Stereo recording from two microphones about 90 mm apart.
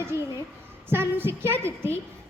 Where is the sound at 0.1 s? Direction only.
30° right (ahead or behind).